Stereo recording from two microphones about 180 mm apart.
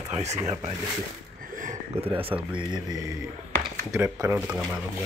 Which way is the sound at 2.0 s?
30° right (ahead or behind).